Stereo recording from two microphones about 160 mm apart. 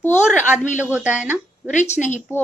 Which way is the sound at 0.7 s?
10° right (ahead or behind).